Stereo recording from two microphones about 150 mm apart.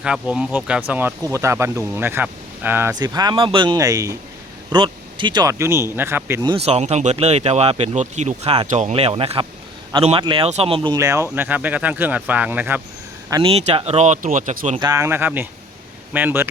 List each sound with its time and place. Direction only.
0.0 s speech: 5° right (ahead or behind)
2.9 s speech: 25° right (ahead or behind)
4.7 s speech: 30° right (ahead or behind); by 6.4 s 15° right (ahead or behind)
6.6 s speech: 45° right (ahead or behind)
10.9 s speech: 20° right (ahead or behind)
13.4 s speech: 45° right (ahead or behind)
14.8 s speech: 20° right (ahead or behind)